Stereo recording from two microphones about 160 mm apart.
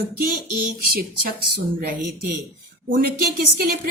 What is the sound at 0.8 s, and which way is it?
A woman's voice, 70° right (ahead or behind).